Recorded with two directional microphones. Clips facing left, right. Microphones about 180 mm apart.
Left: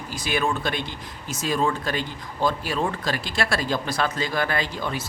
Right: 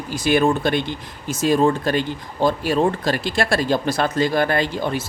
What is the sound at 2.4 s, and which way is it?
Speech, 25° right (ahead or behind).